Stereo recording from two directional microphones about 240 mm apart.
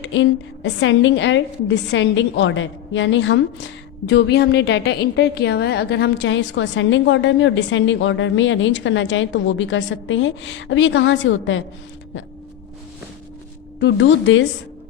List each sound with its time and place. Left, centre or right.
0.0 s a woman's voice: left
13.7 s a woman's voice: left